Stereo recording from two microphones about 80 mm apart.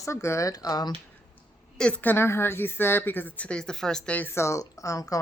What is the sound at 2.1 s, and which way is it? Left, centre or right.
Speech, left.